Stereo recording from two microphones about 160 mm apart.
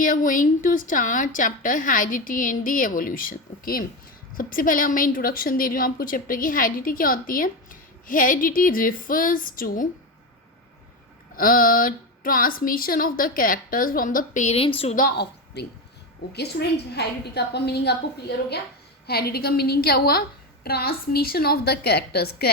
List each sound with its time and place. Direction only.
0.0 s a woman's voice: 55° left (ahead or behind)
11.3 s a woman's voice: 60° left (ahead or behind); by 14.7 s 40° left (ahead or behind)
14.9 s a woman's voice: 75° left (ahead or behind)
16.3 s a woman's voice: 90° left
19.0 s a woman's voice: 80° left